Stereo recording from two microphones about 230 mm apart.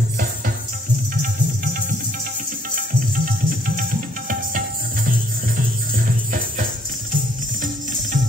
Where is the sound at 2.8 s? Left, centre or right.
Right.